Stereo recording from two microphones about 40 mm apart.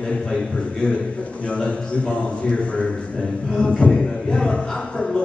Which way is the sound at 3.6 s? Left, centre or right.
Left.